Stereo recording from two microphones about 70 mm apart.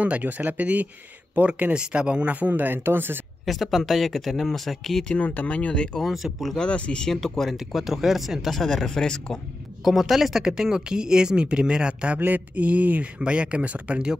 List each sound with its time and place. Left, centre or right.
0.0 s speech: right
3.4 s speech: centre
5.0 s speech: centre
5.9 s speech: centre
6.6 s speech: centre
9.8 s speech: centre
12.2 s speech: right